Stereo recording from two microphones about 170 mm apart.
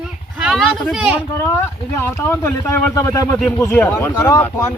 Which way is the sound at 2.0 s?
10° left (ahead or behind).